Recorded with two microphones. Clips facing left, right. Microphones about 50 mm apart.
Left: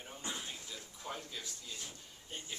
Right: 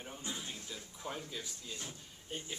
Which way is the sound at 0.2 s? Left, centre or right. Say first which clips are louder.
Left 2 dB; left.